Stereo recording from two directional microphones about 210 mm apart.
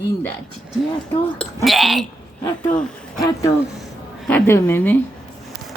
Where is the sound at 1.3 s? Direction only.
Centre (ahead or behind).